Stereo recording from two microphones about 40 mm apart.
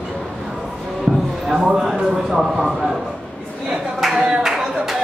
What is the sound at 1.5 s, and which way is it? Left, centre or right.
Speech, centre.